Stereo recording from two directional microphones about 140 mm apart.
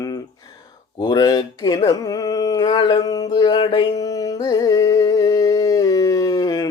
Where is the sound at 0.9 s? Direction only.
30° left (ahead or behind).